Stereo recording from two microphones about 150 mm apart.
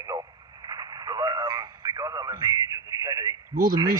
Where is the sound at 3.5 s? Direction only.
70° right (ahead or behind).